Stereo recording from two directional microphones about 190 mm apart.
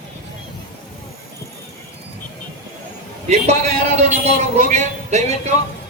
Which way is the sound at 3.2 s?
35° right (ahead or behind).